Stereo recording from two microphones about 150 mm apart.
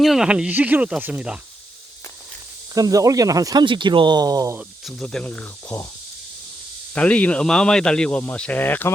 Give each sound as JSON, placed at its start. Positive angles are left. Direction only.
{"t": 0.0, "sound": "speech", "side_deg": 0}
{"t": 2.7, "sound": "speech", "side_deg": -25}
{"t": 4.9, "sound": "speech", "side_deg": 5}
{"t": 6.9, "sound": "speech", "side_deg": 10}